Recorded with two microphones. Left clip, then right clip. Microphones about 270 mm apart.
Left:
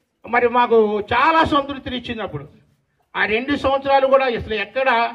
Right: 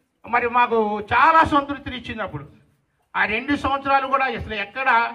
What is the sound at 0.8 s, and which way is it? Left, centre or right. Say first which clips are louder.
A man's voice: even; right.